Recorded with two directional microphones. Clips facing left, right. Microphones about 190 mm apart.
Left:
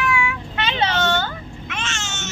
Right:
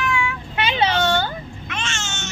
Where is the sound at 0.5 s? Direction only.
10° right (ahead or behind).